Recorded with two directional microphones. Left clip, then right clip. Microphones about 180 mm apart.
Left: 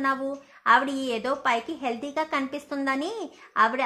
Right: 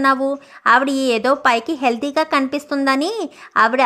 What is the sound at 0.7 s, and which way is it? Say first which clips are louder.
A woman's voice: right 7 dB; 45° right (ahead or behind).